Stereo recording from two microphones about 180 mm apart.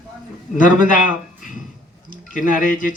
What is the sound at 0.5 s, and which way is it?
Speech, 45° left (ahead or behind).